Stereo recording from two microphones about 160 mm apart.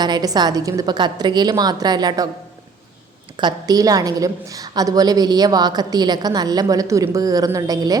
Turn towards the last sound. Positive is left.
turn(degrees=-20)  # may be behind; listen again after turning